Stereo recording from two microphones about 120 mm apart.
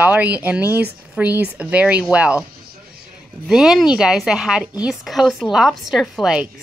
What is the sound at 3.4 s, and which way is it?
A woman's voice, 5° right (ahead or behind).